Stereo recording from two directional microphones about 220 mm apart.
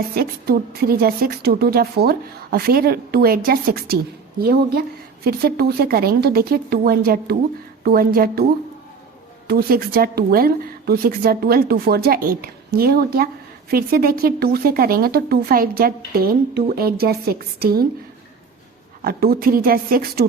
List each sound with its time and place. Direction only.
0.1 s a woman's voice: 45° right (ahead or behind)
9.5 s a woman's voice: 45° right (ahead or behind)
19.0 s a woman's voice: 45° right (ahead or behind)